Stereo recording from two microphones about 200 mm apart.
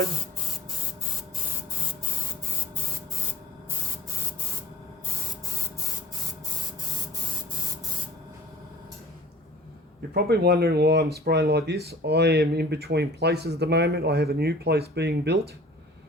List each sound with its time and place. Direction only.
10.2 s speech: 55° right (ahead or behind)